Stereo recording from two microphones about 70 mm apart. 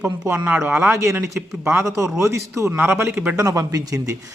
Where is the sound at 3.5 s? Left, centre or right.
Right.